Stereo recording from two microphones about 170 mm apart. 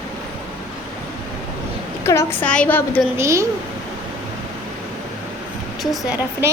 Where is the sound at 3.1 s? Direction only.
15° right (ahead or behind).